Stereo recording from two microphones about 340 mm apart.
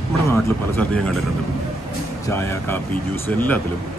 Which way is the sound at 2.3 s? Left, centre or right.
Centre.